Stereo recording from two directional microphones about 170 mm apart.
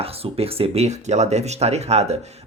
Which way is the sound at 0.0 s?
35° right (ahead or behind).